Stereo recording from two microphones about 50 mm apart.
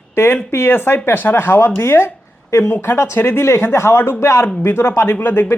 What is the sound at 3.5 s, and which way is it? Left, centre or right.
Speech, left.